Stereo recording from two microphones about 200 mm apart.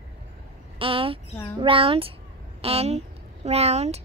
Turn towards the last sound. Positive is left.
turn(degrees=-30)  # may be behind; listen again after turning